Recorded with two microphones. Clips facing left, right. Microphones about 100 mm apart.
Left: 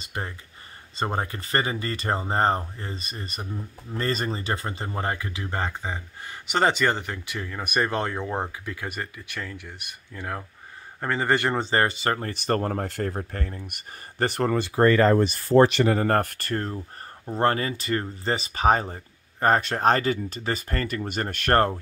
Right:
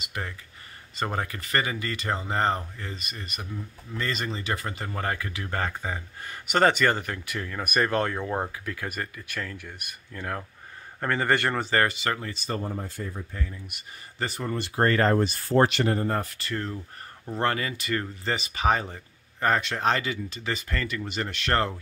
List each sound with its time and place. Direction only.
0.0 s a sound: 30° left (ahead or behind)
0.9 s speech: 30° left (ahead or behind)
12.3 s speech: 65° left (ahead or behind)
16.0 s speech: 65° left (ahead or behind); by 16.7 s 45° left (ahead or behind)
17.3 s speech: 35° left (ahead or behind)